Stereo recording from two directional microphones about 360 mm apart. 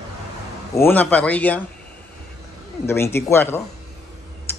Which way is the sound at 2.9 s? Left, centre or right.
Centre.